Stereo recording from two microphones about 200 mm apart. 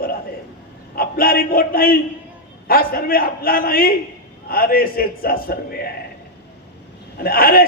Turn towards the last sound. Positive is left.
turn(degrees=45)  # may be behind; listen again after turning